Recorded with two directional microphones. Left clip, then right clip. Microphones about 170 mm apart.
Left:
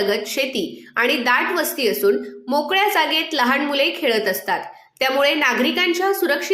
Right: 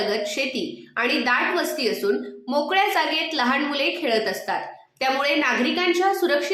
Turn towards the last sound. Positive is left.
turn(degrees=20)  # may be behind; listen again after turning